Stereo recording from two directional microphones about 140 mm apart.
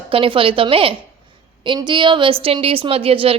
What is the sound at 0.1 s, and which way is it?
Speech, 40° right (ahead or behind).